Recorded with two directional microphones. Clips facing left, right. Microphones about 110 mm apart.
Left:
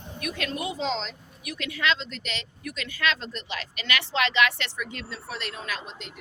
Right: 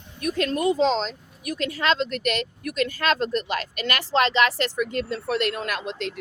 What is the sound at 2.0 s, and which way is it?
Speech, 55° right (ahead or behind).